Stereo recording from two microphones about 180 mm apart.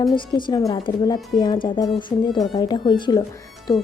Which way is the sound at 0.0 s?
25° left (ahead or behind).